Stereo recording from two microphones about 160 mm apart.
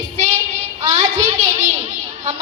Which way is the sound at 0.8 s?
45° right (ahead or behind).